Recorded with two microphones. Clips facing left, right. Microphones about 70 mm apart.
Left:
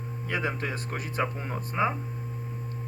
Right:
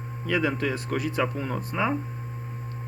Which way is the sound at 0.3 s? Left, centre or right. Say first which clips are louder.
Right 5 dB; left.